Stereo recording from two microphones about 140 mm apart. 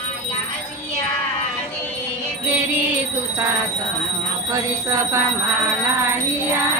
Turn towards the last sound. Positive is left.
turn(degrees=-25)  # may be behind; listen again after turning